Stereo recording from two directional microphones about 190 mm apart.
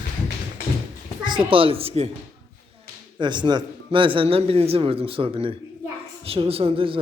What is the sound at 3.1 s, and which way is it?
Speech, 25° right (ahead or behind).